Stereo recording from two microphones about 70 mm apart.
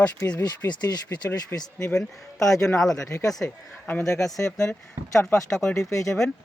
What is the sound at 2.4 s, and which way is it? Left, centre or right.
Speech, left.